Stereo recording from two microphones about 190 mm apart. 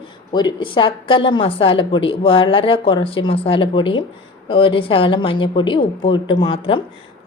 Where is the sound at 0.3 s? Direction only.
25° left (ahead or behind).